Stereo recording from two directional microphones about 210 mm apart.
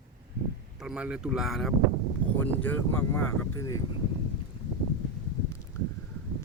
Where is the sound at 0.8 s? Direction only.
5° right (ahead or behind); by 3.7 s 10° left (ahead or behind).